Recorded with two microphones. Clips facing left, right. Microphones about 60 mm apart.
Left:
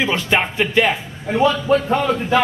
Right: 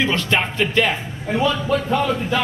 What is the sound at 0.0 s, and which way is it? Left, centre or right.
Speech, centre.